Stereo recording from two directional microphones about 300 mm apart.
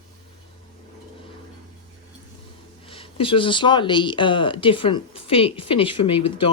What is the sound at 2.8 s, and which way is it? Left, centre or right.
Speech, centre.